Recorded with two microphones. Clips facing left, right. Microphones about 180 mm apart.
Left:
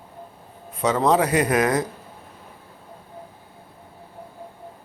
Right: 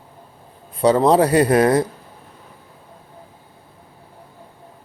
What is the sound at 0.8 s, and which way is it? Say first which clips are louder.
Speech: right 5 dB; 35° right (ahead or behind).